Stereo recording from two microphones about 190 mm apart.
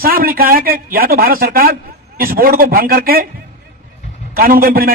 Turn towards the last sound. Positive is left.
turn(degrees=-50)  # may be behind; listen again after turning